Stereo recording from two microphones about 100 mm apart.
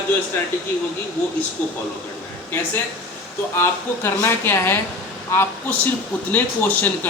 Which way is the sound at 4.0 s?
25° left (ahead or behind).